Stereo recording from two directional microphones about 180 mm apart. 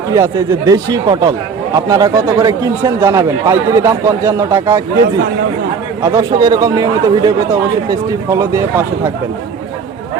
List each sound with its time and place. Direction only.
0.1 s speech: 15° right (ahead or behind)
6.0 s speech: 20° right (ahead or behind)